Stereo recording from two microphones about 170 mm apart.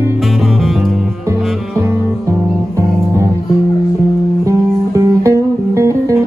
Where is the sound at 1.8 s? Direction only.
15° right (ahead or behind).